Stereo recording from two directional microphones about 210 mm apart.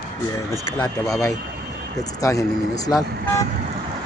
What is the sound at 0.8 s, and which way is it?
Speech, 15° left (ahead or behind).